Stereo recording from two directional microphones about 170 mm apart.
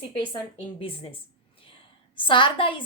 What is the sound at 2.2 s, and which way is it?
Speech, 30° left (ahead or behind).